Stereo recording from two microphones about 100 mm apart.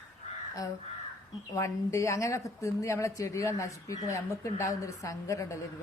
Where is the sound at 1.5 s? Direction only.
30° left (ahead or behind).